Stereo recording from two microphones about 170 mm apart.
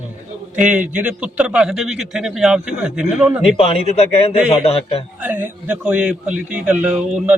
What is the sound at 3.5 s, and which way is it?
Speech, 35° left (ahead or behind).